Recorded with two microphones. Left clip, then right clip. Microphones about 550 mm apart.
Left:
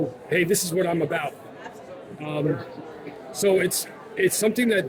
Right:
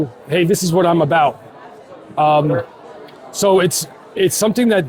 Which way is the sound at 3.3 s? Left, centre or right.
Right.